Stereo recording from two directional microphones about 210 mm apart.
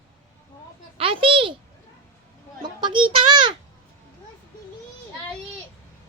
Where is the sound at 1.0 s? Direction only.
25° right (ahead or behind).